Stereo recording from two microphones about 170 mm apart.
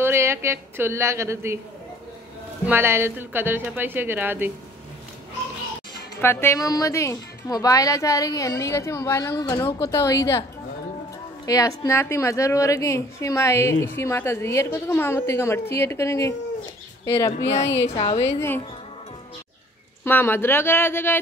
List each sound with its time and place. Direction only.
0.0 s speech: 15° right (ahead or behind)
2.6 s speech: 15° right (ahead or behind)
6.2 s a woman's voice: 15° left (ahead or behind)
11.4 s a woman's voice: 20° left (ahead or behind)
17.8 s a woman's voice: 35° left (ahead or behind)
20.1 s a woman's voice: 10° left (ahead or behind)